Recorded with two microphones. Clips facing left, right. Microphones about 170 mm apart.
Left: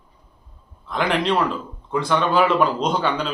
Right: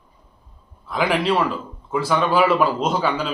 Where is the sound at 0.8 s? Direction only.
5° right (ahead or behind).